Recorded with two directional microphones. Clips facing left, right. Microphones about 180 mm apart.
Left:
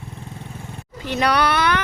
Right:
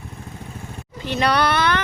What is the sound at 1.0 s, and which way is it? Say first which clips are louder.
Speech: even; 10° left (ahead or behind).